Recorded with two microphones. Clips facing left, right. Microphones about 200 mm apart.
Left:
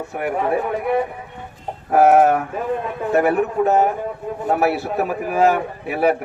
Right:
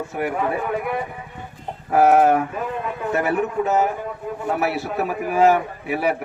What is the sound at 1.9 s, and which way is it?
A man's voice, 50° left (ahead or behind).